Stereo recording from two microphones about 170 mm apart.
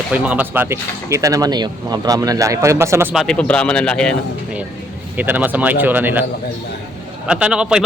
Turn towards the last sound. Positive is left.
turn(degrees=-5)  # may be behind; listen again after turning